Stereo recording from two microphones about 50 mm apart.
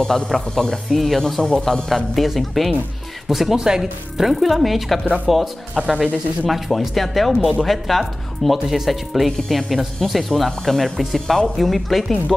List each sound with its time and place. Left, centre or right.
0.0 s speech: centre
5.8 s speech: centre
6.4 s speech: centre